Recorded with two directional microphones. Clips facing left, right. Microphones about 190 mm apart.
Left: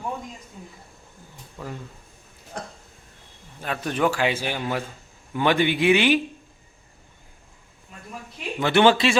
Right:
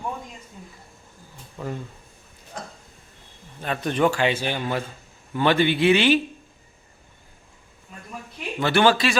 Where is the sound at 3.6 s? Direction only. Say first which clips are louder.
Right 2 dB; 5° left (ahead or behind).